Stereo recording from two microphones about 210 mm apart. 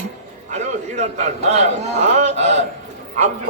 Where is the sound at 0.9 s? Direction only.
30° right (ahead or behind).